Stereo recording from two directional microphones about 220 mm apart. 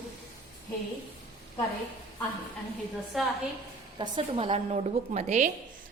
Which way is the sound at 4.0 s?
20° right (ahead or behind).